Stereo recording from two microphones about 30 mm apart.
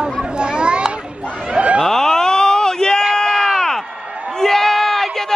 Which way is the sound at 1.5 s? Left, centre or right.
Right.